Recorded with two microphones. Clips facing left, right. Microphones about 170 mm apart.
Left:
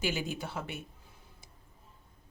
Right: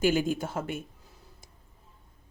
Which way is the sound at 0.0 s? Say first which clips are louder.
Right 9 dB; 45° right (ahead or behind).